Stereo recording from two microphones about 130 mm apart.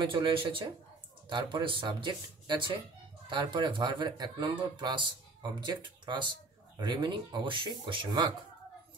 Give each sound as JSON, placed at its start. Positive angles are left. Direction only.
{"t": 0.0, "sound": "speech", "side_deg": -40}